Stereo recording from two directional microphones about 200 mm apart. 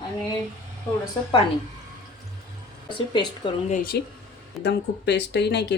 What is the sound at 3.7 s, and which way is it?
Speech, 45° left (ahead or behind).